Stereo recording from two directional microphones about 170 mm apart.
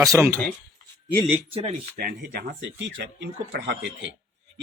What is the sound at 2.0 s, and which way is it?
Speech, 60° right (ahead or behind).